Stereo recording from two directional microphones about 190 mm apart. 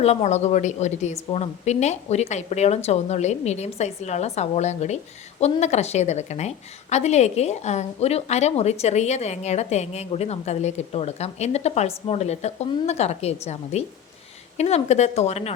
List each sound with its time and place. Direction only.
0.0 s a woman's voice: 35° left (ahead or behind)